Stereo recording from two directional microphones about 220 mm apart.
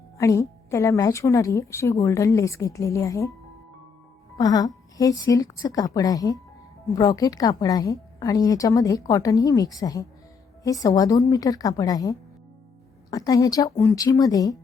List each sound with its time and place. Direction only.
0.2 s a woman's voice: 15° left (ahead or behind)
4.4 s a woman's voice: 15° left (ahead or behind)